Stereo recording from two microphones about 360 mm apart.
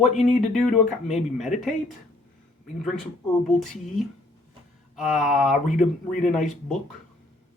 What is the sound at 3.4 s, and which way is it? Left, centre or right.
Speech, centre.